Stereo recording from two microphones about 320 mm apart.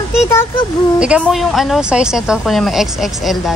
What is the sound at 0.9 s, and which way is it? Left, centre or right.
Speech, centre.